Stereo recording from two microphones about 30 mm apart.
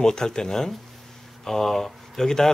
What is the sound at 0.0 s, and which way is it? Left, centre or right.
Speech, left.